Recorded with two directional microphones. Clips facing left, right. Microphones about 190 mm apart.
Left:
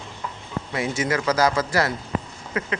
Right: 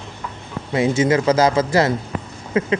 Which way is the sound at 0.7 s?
25° right (ahead or behind).